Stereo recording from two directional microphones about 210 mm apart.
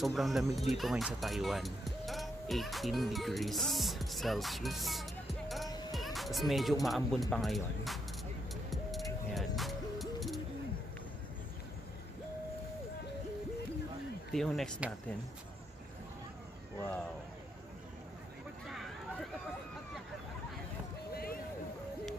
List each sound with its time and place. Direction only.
0.0 s speech: centre (ahead or behind)
8.6 s music: centre (ahead or behind)
14.3 s speech: centre (ahead or behind)
21.1 s vehicle: 45° left (ahead or behind)